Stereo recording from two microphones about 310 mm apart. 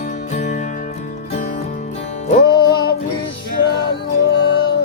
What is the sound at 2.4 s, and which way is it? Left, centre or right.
Music, left.